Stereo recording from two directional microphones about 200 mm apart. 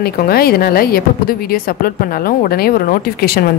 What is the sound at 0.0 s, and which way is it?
Speech, 50° left (ahead or behind).